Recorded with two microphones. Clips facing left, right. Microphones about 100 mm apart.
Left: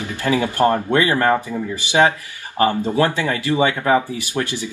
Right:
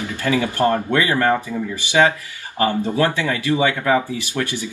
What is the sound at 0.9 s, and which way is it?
Speech, 30° left (ahead or behind).